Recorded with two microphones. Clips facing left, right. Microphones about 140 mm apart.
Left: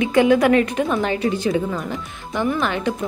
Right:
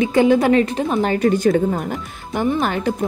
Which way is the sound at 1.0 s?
45° right (ahead or behind).